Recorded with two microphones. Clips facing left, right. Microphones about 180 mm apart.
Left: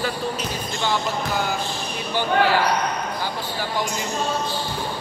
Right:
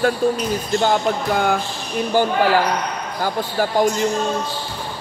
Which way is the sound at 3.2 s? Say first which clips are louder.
Right 7 dB; 45° right (ahead or behind).